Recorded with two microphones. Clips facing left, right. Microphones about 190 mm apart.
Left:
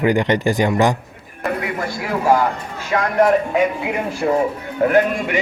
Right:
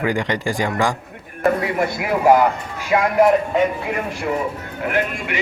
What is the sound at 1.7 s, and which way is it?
Speech, 20° right (ahead or behind).